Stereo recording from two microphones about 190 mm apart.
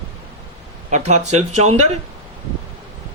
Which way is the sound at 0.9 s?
35° right (ahead or behind).